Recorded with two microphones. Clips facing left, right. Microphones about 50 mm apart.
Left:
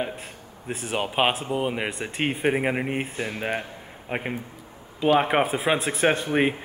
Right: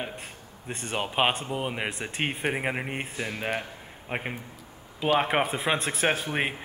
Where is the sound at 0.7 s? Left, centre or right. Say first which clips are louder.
Left 3 dB; centre.